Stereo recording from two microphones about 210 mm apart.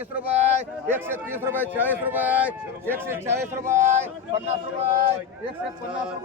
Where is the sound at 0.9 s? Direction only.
10° right (ahead or behind).